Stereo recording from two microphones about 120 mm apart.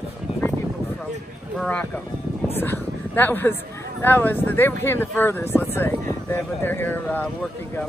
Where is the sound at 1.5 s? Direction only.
10° left (ahead or behind).